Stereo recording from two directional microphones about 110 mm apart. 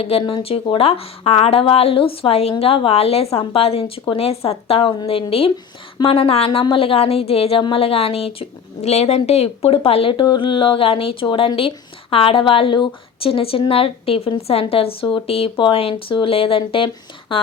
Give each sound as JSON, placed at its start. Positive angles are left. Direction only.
{"t": 0.0, "sound": "a woman's voice", "side_deg": 60}